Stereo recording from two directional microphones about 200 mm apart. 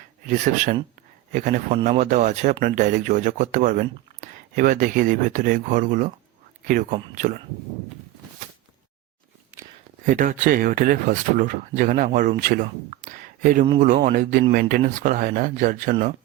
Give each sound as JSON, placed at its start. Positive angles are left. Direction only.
{"t": 0.3, "sound": "speech", "side_deg": -40}
{"t": 10.1, "sound": "speech", "side_deg": -40}